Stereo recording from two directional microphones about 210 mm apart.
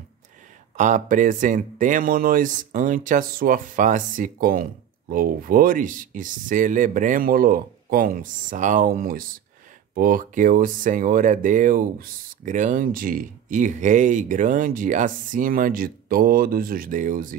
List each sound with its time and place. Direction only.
0.7 s speech: 35° right (ahead or behind)